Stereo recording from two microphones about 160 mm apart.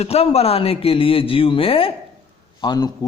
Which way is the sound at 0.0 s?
40° left (ahead or behind).